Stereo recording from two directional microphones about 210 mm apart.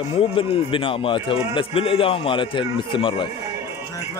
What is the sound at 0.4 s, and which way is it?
A man's voice, 25° left (ahead or behind).